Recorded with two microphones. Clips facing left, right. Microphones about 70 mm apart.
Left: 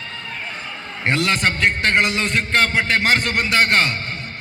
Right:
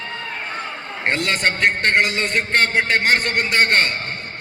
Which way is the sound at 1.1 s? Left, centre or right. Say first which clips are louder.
Left 1 dB; centre.